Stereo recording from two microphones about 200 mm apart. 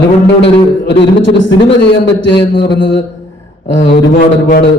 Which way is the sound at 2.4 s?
20° left (ahead or behind).